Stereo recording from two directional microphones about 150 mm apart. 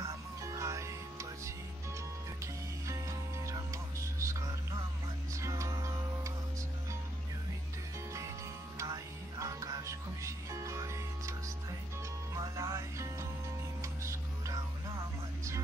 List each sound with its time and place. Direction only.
0.0 s music: 20° right (ahead or behind)
2.4 s music: 20° right (ahead or behind)
8.7 s music: 20° right (ahead or behind)